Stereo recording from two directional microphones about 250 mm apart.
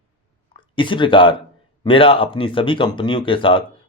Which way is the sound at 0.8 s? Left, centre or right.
Centre.